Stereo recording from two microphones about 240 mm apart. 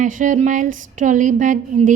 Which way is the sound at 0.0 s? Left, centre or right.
Right.